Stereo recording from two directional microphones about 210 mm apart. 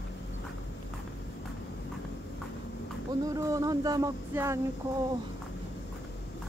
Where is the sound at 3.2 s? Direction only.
15° right (ahead or behind).